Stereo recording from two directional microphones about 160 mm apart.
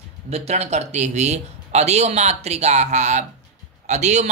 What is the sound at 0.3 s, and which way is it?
A man's voice, 40° right (ahead or behind).